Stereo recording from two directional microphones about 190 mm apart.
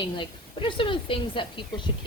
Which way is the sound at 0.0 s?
25° left (ahead or behind).